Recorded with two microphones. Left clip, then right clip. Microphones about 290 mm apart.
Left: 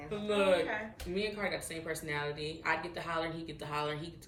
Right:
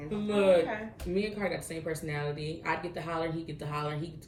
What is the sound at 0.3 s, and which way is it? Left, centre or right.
Speech, centre.